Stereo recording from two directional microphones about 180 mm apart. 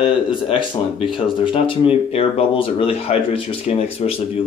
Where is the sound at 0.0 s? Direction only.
30° left (ahead or behind).